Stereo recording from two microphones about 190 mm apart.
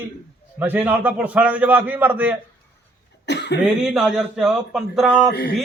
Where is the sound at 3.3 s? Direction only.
65° left (ahead or behind).